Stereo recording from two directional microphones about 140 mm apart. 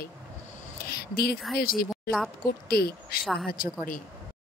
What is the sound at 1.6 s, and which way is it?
Speech, 90° left.